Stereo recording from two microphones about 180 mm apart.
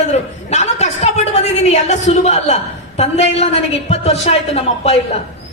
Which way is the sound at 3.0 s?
35° left (ahead or behind).